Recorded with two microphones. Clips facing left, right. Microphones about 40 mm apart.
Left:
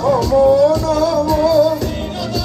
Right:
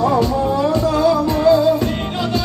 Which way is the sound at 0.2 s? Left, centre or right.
Right.